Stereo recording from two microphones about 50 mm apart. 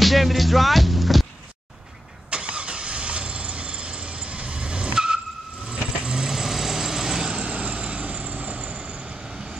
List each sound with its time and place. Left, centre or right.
0.0 s music: centre
2.3 s vehicle: right
7.3 s vehicle: right